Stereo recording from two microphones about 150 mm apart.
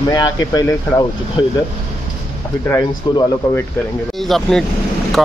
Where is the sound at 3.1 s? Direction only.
25° left (ahead or behind).